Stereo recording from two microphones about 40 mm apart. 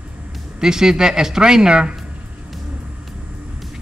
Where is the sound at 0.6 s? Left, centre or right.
Centre.